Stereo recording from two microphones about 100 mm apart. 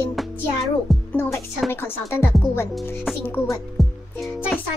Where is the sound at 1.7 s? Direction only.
25° left (ahead or behind).